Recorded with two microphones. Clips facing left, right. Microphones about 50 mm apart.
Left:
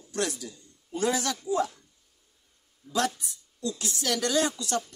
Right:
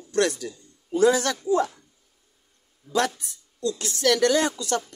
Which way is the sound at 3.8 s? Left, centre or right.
Right.